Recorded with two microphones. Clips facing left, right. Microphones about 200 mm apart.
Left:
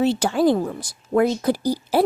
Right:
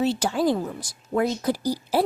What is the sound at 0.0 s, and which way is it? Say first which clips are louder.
A woman's voice: left 4 dB; 60° left (ahead or behind).